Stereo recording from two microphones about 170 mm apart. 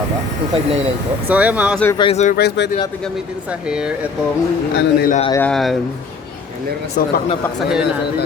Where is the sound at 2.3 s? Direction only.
75° left (ahead or behind).